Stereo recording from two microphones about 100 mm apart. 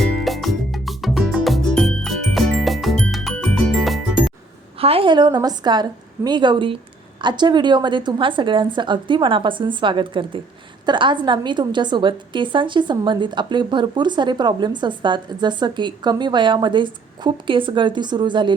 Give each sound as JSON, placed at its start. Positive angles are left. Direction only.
{"t": 0.0, "sound": "music", "side_deg": 0}
{"t": 4.8, "sound": "a woman's voice", "side_deg": -70}
{"t": 5.1, "sound": "a woman's voice", "side_deg": -50}